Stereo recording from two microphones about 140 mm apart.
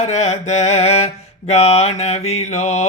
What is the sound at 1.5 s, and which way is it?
Mantra, 50° left (ahead or behind).